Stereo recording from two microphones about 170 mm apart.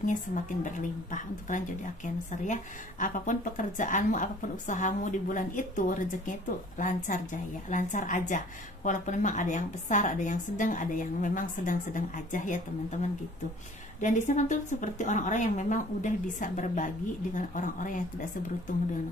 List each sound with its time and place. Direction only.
0.0 s speech: 50° left (ahead or behind)
14.0 s speech: 45° left (ahead or behind)